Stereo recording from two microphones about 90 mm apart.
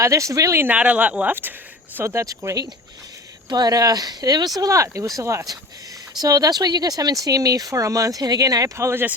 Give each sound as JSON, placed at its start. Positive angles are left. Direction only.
{"t": 0.0, "sound": "speech", "side_deg": -35}
{"t": 0.6, "sound": "speech", "side_deg": -15}
{"t": 2.0, "sound": "speech", "side_deg": -30}
{"t": 6.1, "sound": "speech", "side_deg": -45}